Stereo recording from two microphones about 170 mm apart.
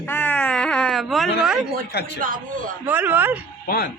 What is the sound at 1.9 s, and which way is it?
Speech, 80° left.